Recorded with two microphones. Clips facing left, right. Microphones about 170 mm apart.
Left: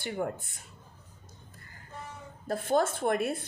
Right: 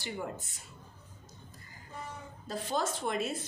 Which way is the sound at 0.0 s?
55° left (ahead or behind).